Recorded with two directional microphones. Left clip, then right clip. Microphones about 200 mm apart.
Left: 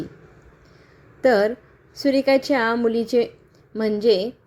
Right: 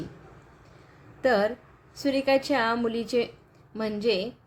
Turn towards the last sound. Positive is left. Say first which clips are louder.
# left 8 dB
turn(degrees=20)  # may be behind; listen again after turning